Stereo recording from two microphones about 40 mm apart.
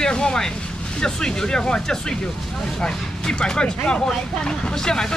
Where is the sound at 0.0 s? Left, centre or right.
Left.